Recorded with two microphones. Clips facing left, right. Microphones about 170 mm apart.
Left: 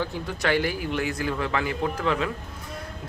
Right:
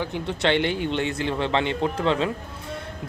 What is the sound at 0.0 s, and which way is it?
Speech, 25° right (ahead or behind).